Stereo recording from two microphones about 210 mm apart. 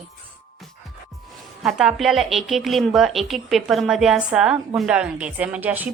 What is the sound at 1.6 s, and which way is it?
A woman's voice, centre (ahead or behind).